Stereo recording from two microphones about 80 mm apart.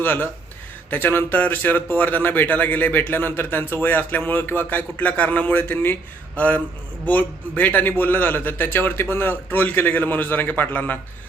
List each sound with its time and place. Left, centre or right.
0.0 s a man's voice: left